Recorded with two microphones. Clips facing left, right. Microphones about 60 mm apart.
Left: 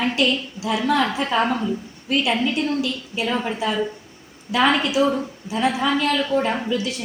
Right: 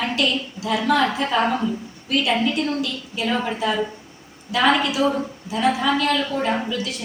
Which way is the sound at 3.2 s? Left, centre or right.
Centre.